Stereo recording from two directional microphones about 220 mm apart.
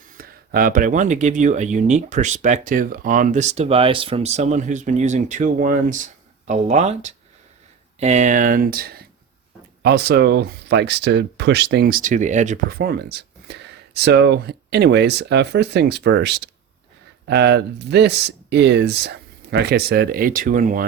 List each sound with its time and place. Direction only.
0.1 s speech: 40° right (ahead or behind)